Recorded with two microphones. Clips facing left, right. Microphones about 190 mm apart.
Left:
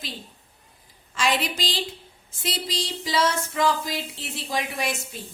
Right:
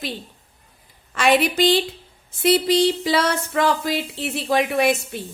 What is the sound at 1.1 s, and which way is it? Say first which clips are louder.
Female singing: right 7 dB; 60° right (ahead or behind).